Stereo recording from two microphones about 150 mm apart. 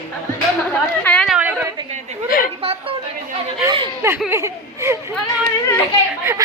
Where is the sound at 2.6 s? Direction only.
40° right (ahead or behind).